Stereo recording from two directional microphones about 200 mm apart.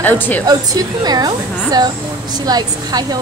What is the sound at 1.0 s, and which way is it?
Speech, 20° right (ahead or behind).